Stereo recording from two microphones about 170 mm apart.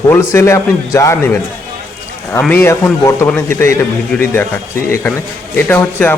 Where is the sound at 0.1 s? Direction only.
15° left (ahead or behind).